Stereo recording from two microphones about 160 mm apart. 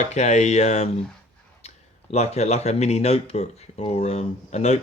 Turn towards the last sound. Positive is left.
turn(degrees=45)  # may be behind; listen again after turning